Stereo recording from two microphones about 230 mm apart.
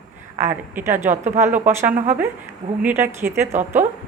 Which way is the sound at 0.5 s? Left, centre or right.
Centre.